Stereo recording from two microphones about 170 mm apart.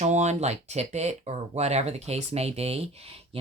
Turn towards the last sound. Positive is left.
turn(degrees=-35)  # may be behind; listen again after turning